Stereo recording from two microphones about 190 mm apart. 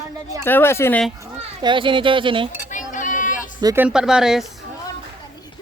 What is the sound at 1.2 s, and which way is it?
A child's voice, 25° right (ahead or behind).